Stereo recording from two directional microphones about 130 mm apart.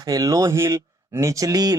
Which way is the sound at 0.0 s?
30° right (ahead or behind).